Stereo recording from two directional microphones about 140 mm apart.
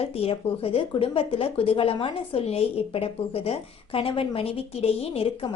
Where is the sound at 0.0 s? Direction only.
45° left (ahead or behind).